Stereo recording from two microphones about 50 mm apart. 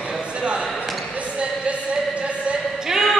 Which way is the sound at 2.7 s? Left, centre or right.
Centre.